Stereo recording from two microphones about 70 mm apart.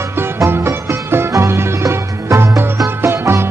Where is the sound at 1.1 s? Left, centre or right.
Right.